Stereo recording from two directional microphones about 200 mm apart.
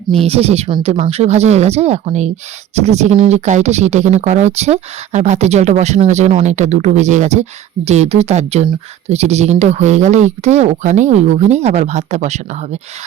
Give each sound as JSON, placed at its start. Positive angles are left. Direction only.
{"t": 0.3, "sound": "speech", "side_deg": -30}